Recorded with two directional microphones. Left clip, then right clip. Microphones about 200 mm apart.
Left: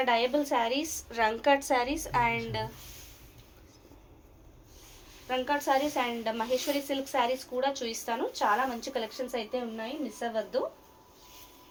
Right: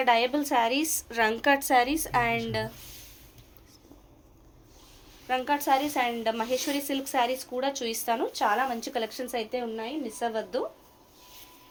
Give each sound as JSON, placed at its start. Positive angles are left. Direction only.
{"t": 0.0, "sound": "speech", "side_deg": -60}
{"t": 5.3, "sound": "speech", "side_deg": -60}